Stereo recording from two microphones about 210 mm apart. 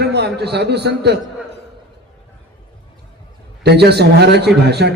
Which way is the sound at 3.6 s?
50° right (ahead or behind).